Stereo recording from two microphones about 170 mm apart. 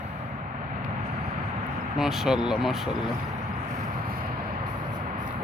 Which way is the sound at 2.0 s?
Centre (ahead or behind).